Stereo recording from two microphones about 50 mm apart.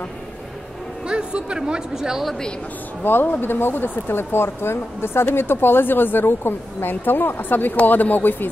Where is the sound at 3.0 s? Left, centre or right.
Left.